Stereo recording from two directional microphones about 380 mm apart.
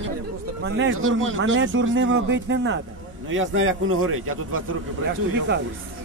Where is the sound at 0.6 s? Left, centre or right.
Right.